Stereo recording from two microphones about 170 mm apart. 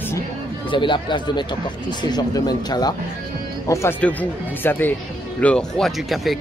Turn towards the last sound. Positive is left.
turn(degrees=0)  # may be behind; listen again after turning